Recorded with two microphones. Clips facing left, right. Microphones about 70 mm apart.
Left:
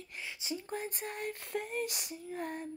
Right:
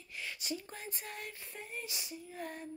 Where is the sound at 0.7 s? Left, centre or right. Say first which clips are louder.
Left 7 dB; left.